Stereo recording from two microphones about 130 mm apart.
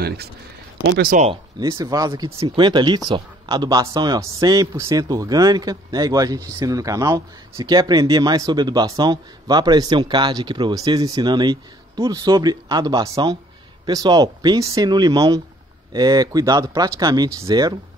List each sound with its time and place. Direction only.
1.0 s speech: 70° right (ahead or behind)
1.6 s a man's voice: 30° right (ahead or behind)